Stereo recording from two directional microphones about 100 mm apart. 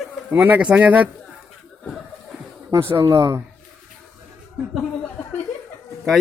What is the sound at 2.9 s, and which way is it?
Speech, 30° right (ahead or behind).